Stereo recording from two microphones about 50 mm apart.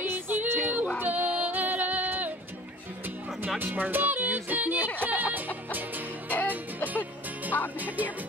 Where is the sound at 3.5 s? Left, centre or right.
Right.